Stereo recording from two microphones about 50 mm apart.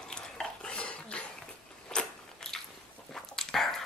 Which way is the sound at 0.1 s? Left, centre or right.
Centre.